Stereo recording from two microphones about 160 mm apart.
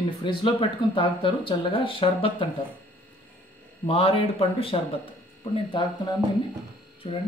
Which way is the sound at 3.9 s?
35° left (ahead or behind).